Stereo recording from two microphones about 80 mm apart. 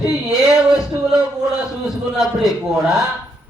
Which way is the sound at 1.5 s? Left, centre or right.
Centre.